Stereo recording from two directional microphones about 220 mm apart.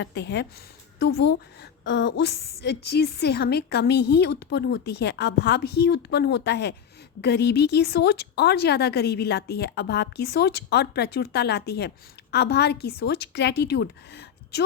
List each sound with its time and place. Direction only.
0.0 s a woman's voice: 50° left (ahead or behind)